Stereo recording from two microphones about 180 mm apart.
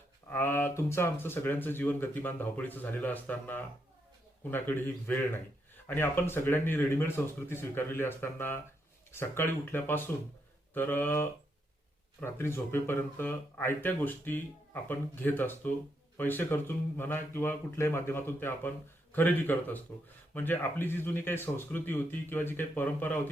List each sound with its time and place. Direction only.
0.3 s speech: 10° left (ahead or behind)